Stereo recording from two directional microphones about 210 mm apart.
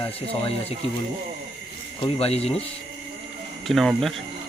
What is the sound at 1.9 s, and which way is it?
Speech, 25° left (ahead or behind).